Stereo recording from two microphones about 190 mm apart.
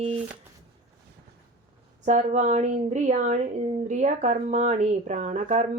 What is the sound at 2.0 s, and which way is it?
Speech, 40° right (ahead or behind).